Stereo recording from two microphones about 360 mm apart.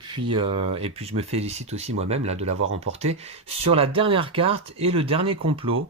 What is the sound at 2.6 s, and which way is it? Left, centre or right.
Speech, right.